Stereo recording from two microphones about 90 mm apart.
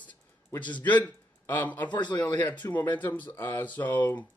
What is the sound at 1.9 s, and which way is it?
Speech, 55° left (ahead or behind).